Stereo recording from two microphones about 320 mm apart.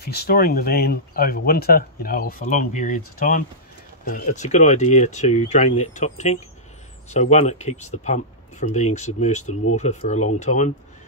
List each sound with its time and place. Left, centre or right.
0.0 s speech: left